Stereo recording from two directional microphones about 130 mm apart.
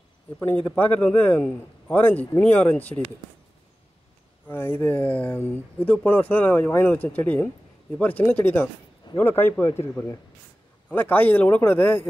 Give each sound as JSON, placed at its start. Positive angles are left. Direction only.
{"t": 0.7, "sound": "speech", "side_deg": 10}
{"t": 4.5, "sound": "speech", "side_deg": 15}